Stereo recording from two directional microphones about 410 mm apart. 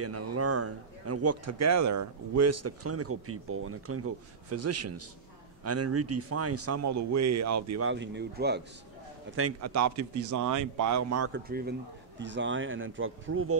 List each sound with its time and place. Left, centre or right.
0.0 s a man's voice: right
7.9 s speech: right
9.3 s a man's voice: right
11.4 s speech: right